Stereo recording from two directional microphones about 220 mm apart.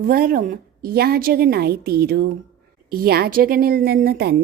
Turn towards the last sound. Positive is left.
turn(degrees=-45)  # may be behind; listen again after turning